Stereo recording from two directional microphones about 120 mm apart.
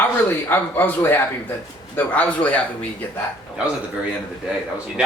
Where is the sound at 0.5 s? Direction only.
15° left (ahead or behind).